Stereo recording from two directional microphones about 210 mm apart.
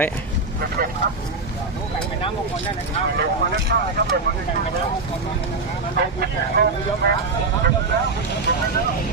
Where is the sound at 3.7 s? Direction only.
50° right (ahead or behind).